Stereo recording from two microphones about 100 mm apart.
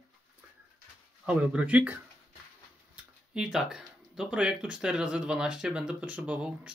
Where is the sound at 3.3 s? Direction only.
5° right (ahead or behind).